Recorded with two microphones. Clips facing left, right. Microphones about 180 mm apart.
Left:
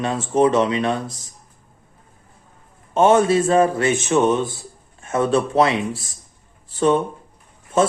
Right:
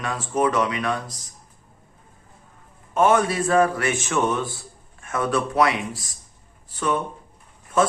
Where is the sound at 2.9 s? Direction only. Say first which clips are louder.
Left 4 dB; 25° left (ahead or behind).